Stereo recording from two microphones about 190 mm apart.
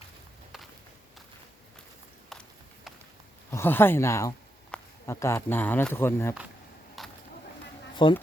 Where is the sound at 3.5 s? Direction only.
10° left (ahead or behind).